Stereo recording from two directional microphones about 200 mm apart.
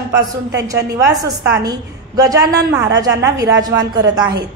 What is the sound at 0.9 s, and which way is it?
A woman's voice, 15° right (ahead or behind).